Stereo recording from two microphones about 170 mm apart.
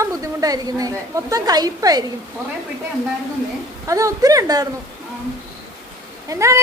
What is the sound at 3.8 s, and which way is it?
Speech, 20° right (ahead or behind).